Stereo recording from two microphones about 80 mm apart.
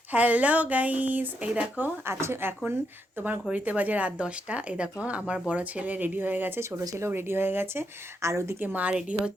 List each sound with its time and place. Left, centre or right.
0.1 s speech: centre
1.8 s speech: right
6.6 s speech: right
7.1 s speech: right
8.6 s speech: centre